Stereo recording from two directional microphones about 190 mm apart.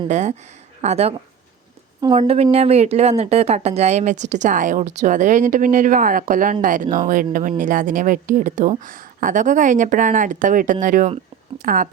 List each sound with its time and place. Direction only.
0.1 s speech: 40° right (ahead or behind)
2.1 s a woman's voice: 30° right (ahead or behind)